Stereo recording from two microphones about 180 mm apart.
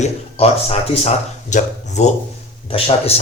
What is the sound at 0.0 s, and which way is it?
Speech, 40° left (ahead or behind).